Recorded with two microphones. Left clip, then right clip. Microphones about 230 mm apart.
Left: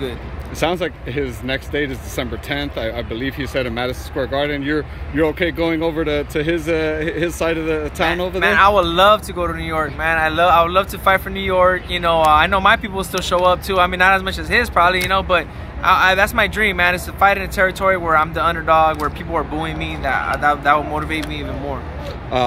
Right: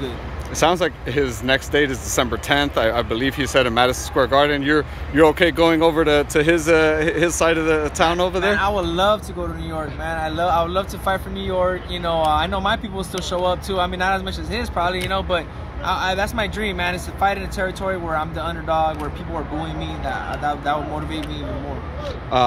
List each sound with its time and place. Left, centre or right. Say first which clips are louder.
0.6 s speech: right 2 dB; centre
8.5 s speech: left 7 dB; centre
9.4 s speech: left 7 dB; centre
20.1 s speech: left 7 dB; centre